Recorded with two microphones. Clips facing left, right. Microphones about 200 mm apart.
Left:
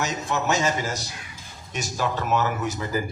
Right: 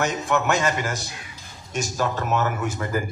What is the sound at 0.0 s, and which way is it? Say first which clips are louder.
A man's voice: right 3 dB; 55° right (ahead or behind).